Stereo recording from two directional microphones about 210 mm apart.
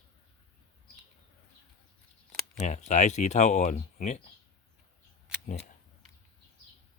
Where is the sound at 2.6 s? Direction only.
35° left (ahead or behind).